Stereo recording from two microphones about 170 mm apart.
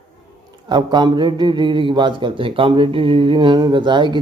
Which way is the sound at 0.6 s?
25° right (ahead or behind).